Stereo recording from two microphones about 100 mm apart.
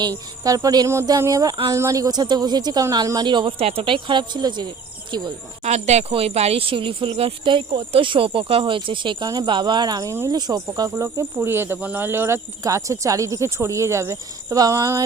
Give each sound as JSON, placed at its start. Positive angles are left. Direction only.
{"t": 0.4, "sound": "speech", "side_deg": -35}
{"t": 3.6, "sound": "speech", "side_deg": -75}
{"t": 5.7, "sound": "speech", "side_deg": -90}